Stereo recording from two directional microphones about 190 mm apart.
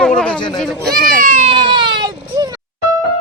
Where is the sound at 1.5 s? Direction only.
25° right (ahead or behind).